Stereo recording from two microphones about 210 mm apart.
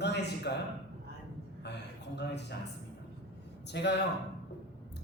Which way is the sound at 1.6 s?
55° left (ahead or behind).